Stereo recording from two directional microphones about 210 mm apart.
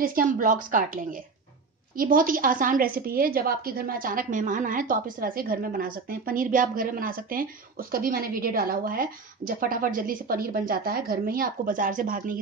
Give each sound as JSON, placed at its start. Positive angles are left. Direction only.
{"t": 0.0, "sound": "a woman's voice", "side_deg": -40}
{"t": 2.0, "sound": "a woman's voice", "side_deg": -40}